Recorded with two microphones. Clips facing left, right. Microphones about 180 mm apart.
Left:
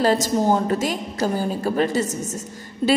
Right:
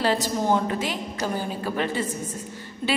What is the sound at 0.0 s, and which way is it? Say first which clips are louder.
A woman's voice: left 5 dB; 40° left (ahead or behind).